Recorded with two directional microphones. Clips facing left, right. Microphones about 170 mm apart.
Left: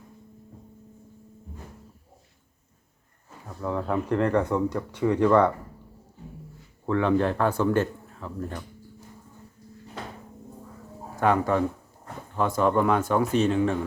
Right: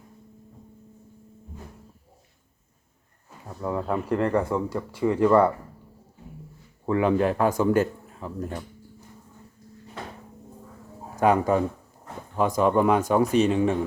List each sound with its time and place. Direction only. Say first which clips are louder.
3.6 s speech: even; 10° right (ahead or behind)
6.8 s speech: right 1 dB; 10° right (ahead or behind)
11.2 s speech: right 2 dB; 15° right (ahead or behind)